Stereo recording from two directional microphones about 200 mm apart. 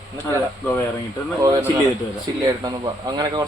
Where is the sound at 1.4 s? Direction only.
15° right (ahead or behind).